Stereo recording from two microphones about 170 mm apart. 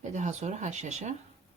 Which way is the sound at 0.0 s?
45° right (ahead or behind).